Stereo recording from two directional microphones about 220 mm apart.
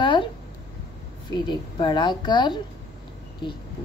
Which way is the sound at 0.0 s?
20° left (ahead or behind).